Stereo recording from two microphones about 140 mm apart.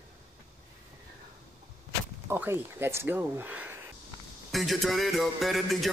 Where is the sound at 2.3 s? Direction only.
15° right (ahead or behind).